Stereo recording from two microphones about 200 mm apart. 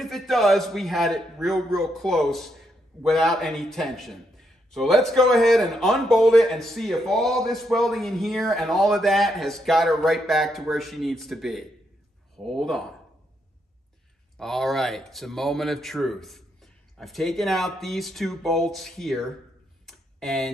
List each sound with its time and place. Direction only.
0.0 s speech: centre (ahead or behind)
14.3 s speech: centre (ahead or behind)
19.9 s a sound: centre (ahead or behind)